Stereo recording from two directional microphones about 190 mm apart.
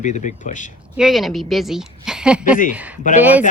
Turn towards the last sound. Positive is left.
turn(degrees=-10)  # may be behind; listen again after turning